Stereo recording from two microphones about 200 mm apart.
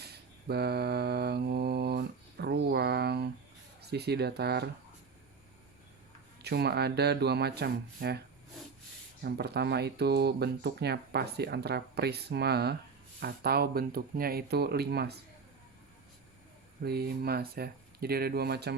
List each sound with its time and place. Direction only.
0.0 s mantra: 55° right (ahead or behind)
3.8 s speech: 55° right (ahead or behind)
6.4 s speech: 55° right (ahead or behind)
9.2 s speech: 55° right (ahead or behind)
16.8 s speech: 50° right (ahead or behind)